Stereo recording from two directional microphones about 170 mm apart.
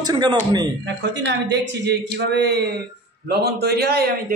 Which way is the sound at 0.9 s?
90° right.